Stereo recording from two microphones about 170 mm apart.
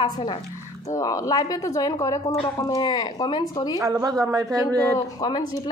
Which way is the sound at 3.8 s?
20° right (ahead or behind).